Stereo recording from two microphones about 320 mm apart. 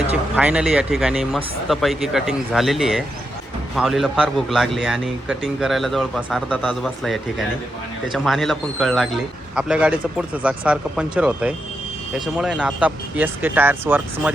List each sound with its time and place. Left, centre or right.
0.1 s a man's voice: centre